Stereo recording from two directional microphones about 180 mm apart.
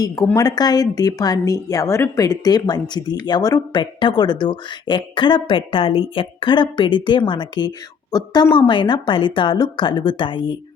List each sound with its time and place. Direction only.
0.3 s a woman's voice: 20° left (ahead or behind)